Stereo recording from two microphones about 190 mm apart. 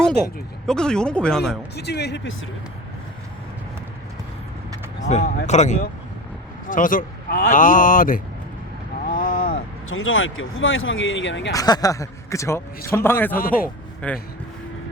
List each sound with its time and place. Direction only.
0.7 s speech: 5° left (ahead or behind)
1.7 s speech: 60° left (ahead or behind)
5.0 s speech: 40° left (ahead or behind)
9.0 s a sound: 45° left (ahead or behind)
9.9 s speech: 90° left; by 11.5 s 75° left (ahead or behind)
11.5 s a man's voice: 20° left (ahead or behind)
13.4 s speech: 50° left (ahead or behind)
14.0 s a man's voice: 5° left (ahead or behind)